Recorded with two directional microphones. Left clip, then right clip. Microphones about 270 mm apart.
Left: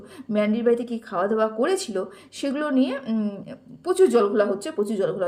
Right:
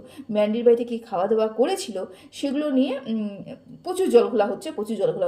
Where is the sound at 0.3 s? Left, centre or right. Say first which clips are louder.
Right 3 dB; centre.